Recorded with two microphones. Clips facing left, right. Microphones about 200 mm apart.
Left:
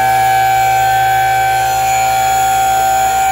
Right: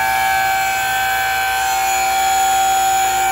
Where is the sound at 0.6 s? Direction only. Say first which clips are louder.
Left 9 dB; 50° left (ahead or behind).